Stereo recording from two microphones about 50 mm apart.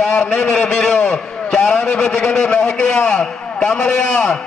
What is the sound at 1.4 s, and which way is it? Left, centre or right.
A man's voice, left.